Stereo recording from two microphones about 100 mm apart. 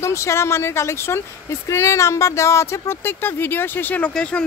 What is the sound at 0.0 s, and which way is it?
Speech, 30° left (ahead or behind).